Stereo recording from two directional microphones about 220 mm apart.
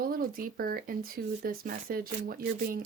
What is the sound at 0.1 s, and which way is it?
Speech, 40° right (ahead or behind).